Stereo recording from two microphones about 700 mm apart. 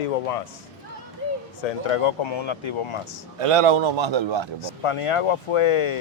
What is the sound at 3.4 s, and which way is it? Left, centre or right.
A man's voice, right.